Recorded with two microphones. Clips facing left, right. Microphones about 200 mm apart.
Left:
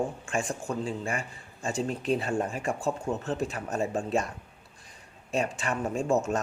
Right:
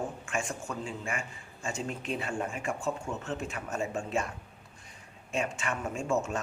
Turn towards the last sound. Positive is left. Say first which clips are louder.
# left 4 dB
turn(degrees=40)  # may be behind; listen again after turning